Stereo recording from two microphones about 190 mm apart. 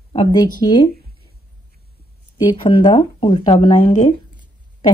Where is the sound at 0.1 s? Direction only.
25° left (ahead or behind).